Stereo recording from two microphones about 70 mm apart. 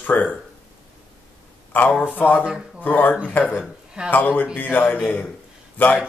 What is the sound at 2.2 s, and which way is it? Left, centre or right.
Speech, left.